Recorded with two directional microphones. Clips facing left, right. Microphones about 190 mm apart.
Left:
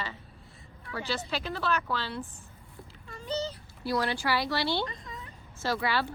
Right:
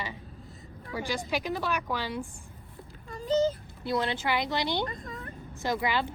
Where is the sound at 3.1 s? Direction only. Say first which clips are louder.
Right 8 dB; 40° right (ahead or behind).